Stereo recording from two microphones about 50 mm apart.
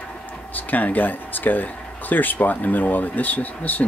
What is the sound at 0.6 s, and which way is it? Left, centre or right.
Speech, left.